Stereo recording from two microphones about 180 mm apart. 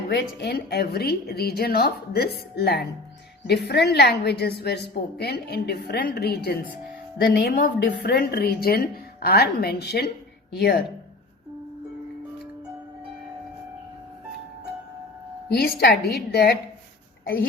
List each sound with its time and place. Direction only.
0.1 s a woman's voice: 65° left (ahead or behind)
15.6 s a woman's voice: 60° left (ahead or behind)